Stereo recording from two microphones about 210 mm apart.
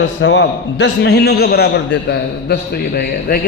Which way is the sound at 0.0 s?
60° left (ahead or behind).